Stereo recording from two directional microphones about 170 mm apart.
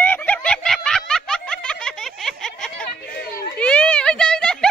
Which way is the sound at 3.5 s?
5° left (ahead or behind).